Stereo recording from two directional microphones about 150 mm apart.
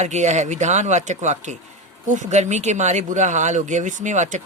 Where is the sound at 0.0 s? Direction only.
50° right (ahead or behind).